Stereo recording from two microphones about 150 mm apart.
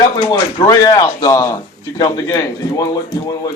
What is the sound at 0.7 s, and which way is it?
A man's voice, 25° left (ahead or behind).